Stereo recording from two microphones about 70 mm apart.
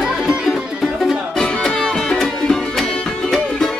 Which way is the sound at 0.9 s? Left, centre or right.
Centre.